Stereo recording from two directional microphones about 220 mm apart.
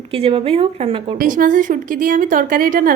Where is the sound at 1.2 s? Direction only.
35° right (ahead or behind).